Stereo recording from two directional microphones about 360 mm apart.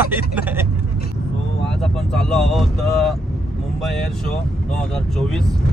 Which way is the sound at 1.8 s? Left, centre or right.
Centre.